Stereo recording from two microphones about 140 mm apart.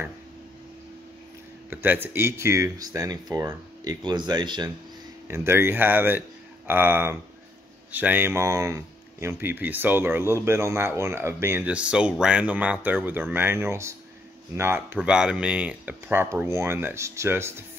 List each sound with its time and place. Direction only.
1.7 s speech: 15° right (ahead or behind)
5.3 s speech: 15° right (ahead or behind)
15.0 s speech: 5° right (ahead or behind)